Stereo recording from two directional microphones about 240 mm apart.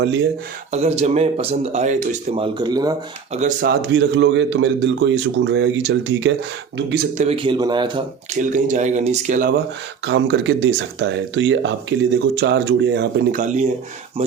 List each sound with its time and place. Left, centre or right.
0.7 s speech: right
3.3 s speech: right
7.2 s speech: right
8.4 s speech: right
10.1 s speech: right
13.4 s speech: right